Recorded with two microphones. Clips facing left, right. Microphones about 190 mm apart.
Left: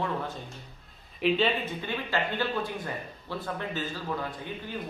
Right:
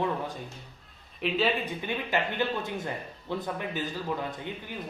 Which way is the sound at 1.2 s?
Centre (ahead or behind).